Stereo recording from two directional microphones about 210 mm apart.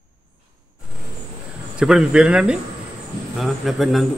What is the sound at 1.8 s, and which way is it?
Speech, 5° right (ahead or behind).